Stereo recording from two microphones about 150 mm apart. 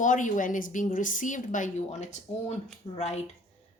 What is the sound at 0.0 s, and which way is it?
A woman's voice, 60° left (ahead or behind).